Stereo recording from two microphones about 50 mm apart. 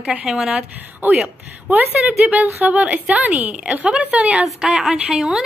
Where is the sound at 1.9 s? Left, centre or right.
Right.